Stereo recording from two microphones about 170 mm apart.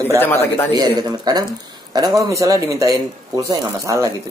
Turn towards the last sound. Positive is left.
turn(degrees=-20)  # may be behind; listen again after turning